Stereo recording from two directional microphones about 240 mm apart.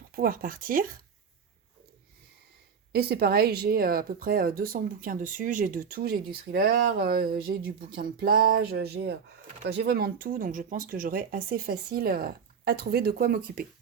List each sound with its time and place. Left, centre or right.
0.2 s speech: right
2.9 s speech: right